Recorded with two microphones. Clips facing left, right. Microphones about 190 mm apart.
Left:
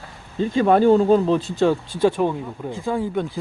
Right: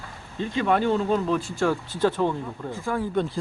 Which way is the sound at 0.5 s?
40° left (ahead or behind).